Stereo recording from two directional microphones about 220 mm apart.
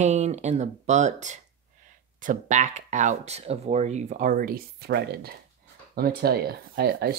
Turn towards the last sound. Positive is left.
turn(degrees=-45)  # may be behind; listen again after turning